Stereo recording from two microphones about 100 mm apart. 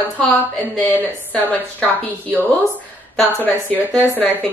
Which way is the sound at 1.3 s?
15° left (ahead or behind).